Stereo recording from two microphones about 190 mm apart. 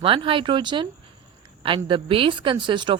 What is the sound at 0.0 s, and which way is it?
Speech, 30° right (ahead or behind).